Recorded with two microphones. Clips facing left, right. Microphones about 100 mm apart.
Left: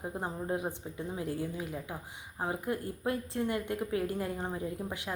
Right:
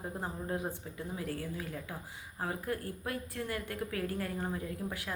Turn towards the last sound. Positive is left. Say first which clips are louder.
# left 2 dB
turn(degrees=20)  # may be behind; listen again after turning